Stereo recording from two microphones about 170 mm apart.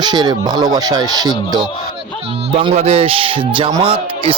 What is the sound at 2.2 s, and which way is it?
A man's voice, 35° right (ahead or behind).